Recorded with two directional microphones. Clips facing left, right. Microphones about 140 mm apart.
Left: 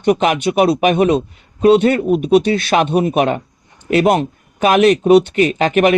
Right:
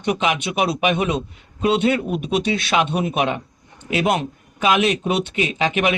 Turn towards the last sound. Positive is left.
turn(degrees=50)  # may be behind; listen again after turning